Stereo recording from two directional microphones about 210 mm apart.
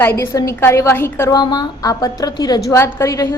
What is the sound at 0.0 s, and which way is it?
A woman's voice, 10° left (ahead or behind).